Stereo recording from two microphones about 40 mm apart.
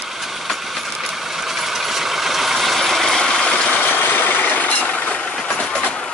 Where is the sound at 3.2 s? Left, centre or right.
Centre.